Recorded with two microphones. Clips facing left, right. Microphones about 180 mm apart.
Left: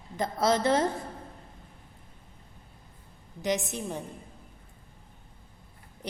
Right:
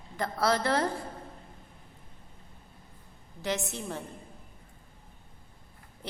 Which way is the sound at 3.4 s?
15° left (ahead or behind).